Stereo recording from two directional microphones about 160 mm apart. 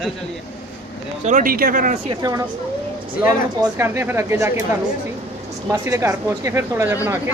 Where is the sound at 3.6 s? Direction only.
15° right (ahead or behind).